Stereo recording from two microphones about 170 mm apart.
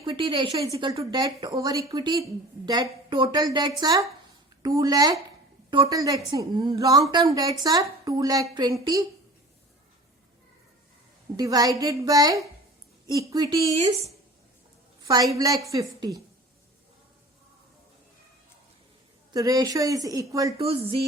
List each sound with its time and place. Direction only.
0.0 s a woman's voice: 30° right (ahead or behind)
11.3 s a woman's voice: 20° right (ahead or behind)
15.0 s a woman's voice: 20° right (ahead or behind)
19.3 s a woman's voice: 20° right (ahead or behind)
20.6 s speech: 35° right (ahead or behind)